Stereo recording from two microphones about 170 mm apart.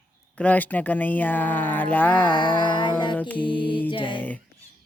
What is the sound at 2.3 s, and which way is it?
Music, 30° left (ahead or behind).